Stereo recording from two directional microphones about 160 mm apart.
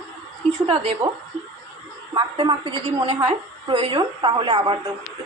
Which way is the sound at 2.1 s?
25° right (ahead or behind).